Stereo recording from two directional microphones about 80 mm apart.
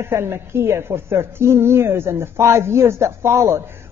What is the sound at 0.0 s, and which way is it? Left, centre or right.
A woman's voice, right.